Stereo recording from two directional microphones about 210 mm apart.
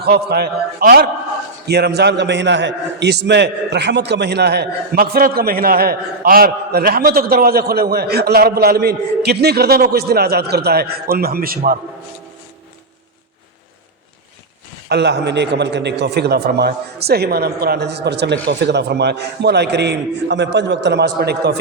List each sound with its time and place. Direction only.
0.0 s a man's voice: 50° right (ahead or behind)
14.8 s a man's voice: 55° right (ahead or behind)